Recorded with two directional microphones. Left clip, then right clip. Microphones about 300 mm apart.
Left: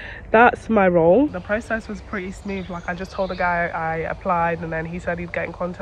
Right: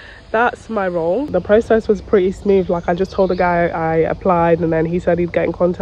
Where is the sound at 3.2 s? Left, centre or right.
Right.